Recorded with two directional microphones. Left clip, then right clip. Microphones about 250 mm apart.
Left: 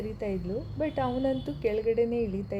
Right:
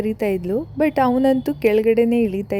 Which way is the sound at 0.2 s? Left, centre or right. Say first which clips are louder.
Right 10 dB; right.